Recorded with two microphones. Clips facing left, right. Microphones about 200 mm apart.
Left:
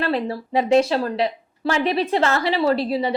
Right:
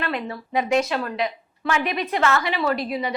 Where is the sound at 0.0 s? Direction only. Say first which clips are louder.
Left 5 dB; 30° left (ahead or behind).